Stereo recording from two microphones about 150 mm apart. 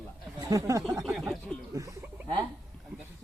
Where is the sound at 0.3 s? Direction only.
20° right (ahead or behind).